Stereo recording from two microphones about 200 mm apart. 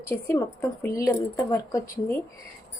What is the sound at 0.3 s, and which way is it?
Speech, 10° left (ahead or behind).